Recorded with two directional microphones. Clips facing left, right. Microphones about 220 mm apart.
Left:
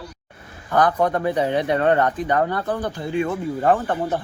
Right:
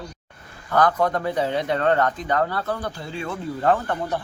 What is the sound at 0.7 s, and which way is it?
Speech, 15° left (ahead or behind).